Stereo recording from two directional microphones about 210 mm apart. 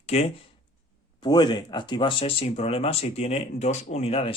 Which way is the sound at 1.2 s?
20° left (ahead or behind).